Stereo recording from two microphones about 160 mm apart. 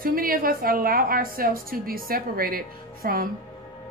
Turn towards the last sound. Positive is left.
turn(degrees=-65)  # may be behind; listen again after turning